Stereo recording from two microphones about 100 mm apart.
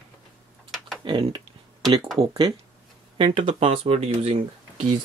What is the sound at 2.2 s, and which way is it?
Speech, 90° right.